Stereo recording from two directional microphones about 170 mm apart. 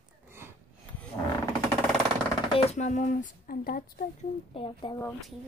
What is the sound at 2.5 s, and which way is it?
Speech, 40° left (ahead or behind).